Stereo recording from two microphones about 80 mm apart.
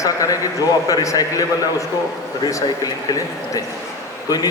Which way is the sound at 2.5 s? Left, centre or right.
Left.